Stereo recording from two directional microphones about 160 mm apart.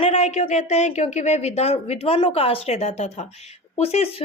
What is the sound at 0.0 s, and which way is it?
A woman's voice, 45° left (ahead or behind).